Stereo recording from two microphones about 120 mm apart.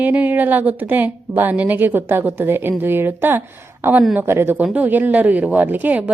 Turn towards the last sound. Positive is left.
turn(degrees=-10)  # may be behind; listen again after turning